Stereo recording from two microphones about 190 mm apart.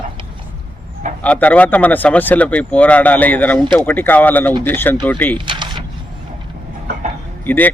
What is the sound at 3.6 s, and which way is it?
Speech, 25° right (ahead or behind).